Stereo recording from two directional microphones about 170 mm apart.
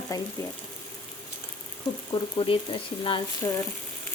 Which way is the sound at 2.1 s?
30° left (ahead or behind).